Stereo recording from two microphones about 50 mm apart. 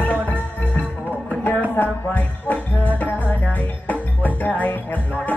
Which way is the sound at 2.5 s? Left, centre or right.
Left.